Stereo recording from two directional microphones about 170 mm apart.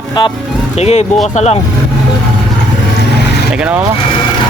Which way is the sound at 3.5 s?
5° right (ahead or behind).